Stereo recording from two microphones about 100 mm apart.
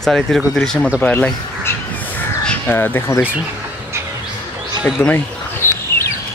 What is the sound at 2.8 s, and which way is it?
Speech, 25° left (ahead or behind).